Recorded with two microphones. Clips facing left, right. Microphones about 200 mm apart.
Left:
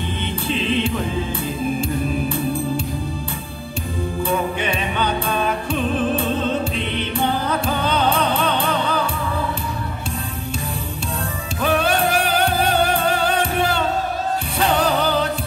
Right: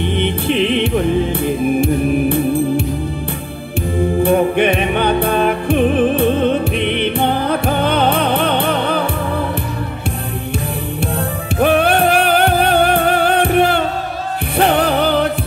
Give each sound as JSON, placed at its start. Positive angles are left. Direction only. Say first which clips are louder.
{"t": 0.0, "sound": "music", "louder": "right 8 dB", "side_deg": -65}
{"t": 4.2, "sound": "music", "louder": "right 9 dB", "side_deg": -60}
{"t": 11.6, "sound": "music", "louder": "right 6 dB", "side_deg": -60}